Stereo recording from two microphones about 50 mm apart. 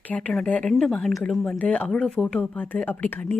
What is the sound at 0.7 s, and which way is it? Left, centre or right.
Speech, centre.